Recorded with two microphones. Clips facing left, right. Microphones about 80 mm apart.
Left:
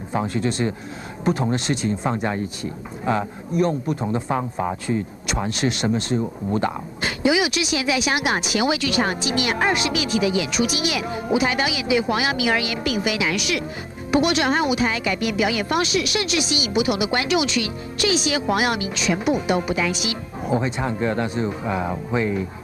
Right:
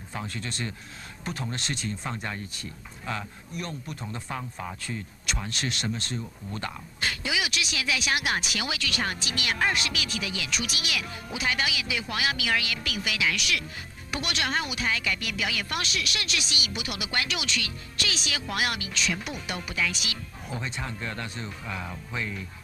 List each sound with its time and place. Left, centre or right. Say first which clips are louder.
0.1 s a man's voice: left 13 dB; centre
4.4 s a man's voice: left 12 dB; left
4.8 s speech: left 10 dB; centre